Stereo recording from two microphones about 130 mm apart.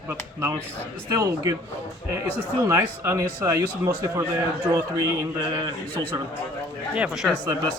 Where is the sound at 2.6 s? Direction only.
20° right (ahead or behind).